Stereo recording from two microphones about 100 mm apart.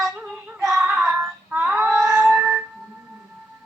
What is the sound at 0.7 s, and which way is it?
Child singing, 5° right (ahead or behind).